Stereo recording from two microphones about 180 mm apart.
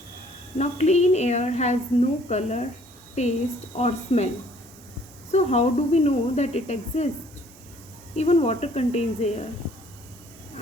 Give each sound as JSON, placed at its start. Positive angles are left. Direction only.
{"t": 0.6, "sound": "a woman's voice", "side_deg": 40}
{"t": 3.8, "sound": "a woman's voice", "side_deg": 35}
{"t": 5.3, "sound": "a woman's voice", "side_deg": 40}
{"t": 8.1, "sound": "a woman's voice", "side_deg": 35}